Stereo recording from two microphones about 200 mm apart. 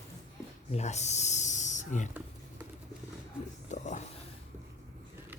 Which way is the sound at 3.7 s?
35° left (ahead or behind).